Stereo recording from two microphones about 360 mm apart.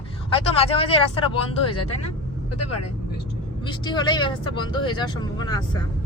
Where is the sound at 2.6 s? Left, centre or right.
Left.